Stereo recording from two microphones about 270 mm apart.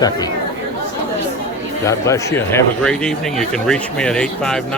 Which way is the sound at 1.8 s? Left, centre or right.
Centre.